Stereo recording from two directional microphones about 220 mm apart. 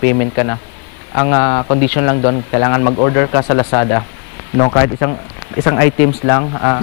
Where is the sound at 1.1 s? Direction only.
20° left (ahead or behind).